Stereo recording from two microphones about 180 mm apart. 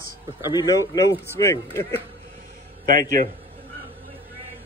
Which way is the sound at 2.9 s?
50° right (ahead or behind).